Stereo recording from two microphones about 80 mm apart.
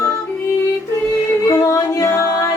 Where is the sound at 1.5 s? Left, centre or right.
Left.